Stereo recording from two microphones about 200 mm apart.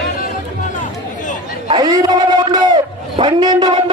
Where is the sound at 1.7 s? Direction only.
20° right (ahead or behind).